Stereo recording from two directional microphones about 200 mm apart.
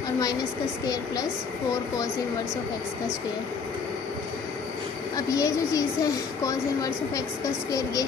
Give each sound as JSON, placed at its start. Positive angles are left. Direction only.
{"t": 5.1, "sound": "a woman's voice", "side_deg": 15}